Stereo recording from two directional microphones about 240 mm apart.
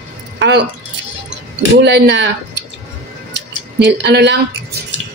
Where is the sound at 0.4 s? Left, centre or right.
Right.